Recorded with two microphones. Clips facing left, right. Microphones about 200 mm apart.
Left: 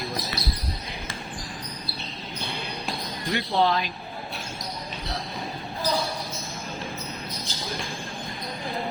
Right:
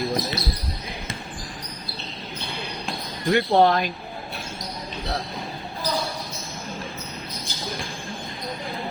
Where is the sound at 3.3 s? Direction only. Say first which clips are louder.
Right 6 dB; 55° right (ahead or behind).